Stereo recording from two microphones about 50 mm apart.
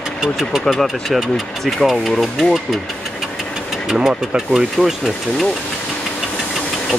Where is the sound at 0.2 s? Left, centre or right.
Centre.